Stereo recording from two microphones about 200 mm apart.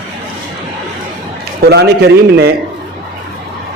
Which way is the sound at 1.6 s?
55° right (ahead or behind).